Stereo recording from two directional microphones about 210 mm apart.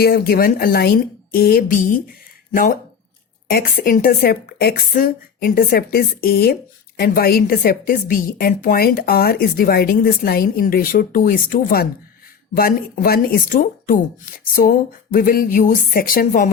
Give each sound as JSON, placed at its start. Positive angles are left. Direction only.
{"t": 0.0, "sound": "a woman's voice", "side_deg": 45}
{"t": 3.5, "sound": "a woman's voice", "side_deg": 40}